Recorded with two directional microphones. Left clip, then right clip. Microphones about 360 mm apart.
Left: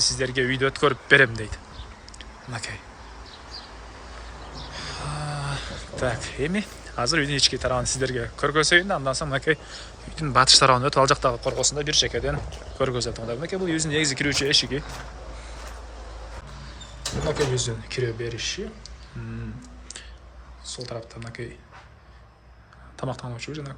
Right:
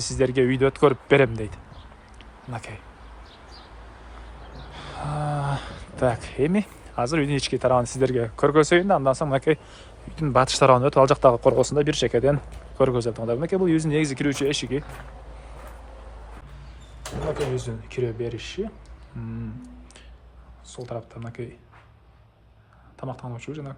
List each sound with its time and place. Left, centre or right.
0.0 s speech: centre
4.7 s speech: centre
17.5 s speech: centre
20.7 s speech: centre
23.0 s speech: centre